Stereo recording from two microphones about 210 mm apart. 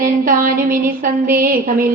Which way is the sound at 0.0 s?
40° right (ahead or behind).